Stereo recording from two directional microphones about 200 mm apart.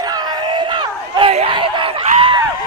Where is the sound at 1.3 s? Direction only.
30° right (ahead or behind).